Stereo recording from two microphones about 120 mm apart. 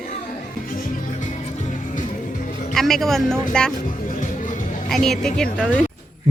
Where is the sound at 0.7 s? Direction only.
90° left.